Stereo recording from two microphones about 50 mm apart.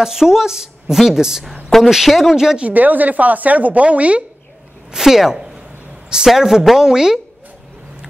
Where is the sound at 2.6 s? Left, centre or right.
Right.